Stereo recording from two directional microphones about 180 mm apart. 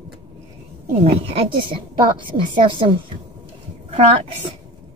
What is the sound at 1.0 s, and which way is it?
A woman's voice, 30° right (ahead or behind).